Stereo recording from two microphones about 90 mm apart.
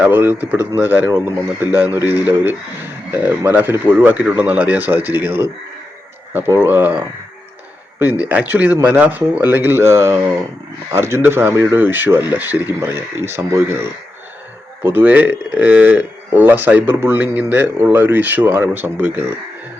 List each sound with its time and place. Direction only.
0.0 s speech: 25° right (ahead or behind)
8.2 s speech: 15° right (ahead or behind)
11.5 s speech: 35° right (ahead or behind)
11.8 s speech: 20° right (ahead or behind)
14.8 s speech: 20° right (ahead or behind)